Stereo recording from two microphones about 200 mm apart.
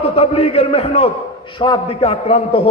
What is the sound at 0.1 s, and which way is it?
A man's voice, 30° left (ahead or behind).